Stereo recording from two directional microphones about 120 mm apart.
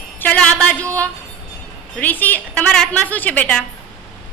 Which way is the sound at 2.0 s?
15° left (ahead or behind).